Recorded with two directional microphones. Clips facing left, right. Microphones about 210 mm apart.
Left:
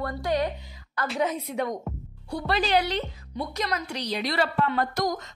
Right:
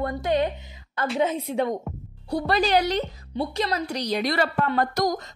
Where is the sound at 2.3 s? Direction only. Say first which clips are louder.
Right 3 dB; 40° right (ahead or behind).